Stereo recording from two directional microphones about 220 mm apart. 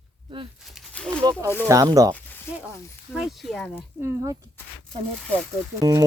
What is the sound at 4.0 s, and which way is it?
Speech, 15° right (ahead or behind).